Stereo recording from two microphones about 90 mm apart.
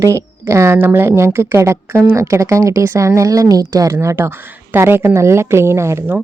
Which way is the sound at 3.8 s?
35° right (ahead or behind).